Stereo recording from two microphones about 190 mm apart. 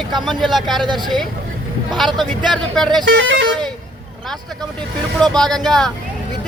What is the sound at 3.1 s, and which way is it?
Speech, 75° right (ahead or behind).